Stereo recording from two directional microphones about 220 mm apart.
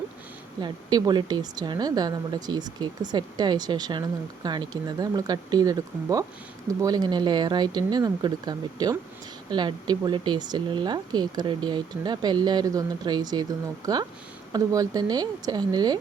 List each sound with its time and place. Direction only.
0.6 s a woman's voice: 20° right (ahead or behind)